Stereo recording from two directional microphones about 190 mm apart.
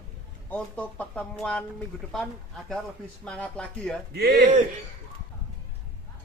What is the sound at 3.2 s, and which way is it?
Speech, 5° left (ahead or behind).